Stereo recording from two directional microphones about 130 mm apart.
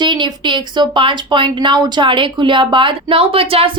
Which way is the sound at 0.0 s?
35° right (ahead or behind).